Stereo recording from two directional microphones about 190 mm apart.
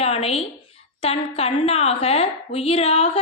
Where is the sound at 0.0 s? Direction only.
30° left (ahead or behind).